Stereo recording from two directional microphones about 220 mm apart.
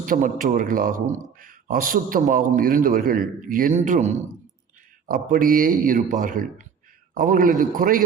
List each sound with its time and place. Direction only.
0.0 s a man's voice: 40° right (ahead or behind)